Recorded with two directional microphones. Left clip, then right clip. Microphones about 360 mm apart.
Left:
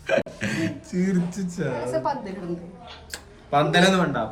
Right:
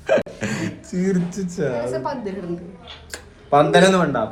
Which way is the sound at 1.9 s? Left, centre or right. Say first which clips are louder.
Even; centre.